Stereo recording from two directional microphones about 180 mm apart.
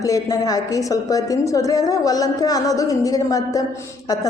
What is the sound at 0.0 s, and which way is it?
A woman's voice, 20° left (ahead or behind).